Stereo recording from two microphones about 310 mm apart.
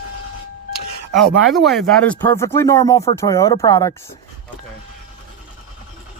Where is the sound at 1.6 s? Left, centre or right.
Centre.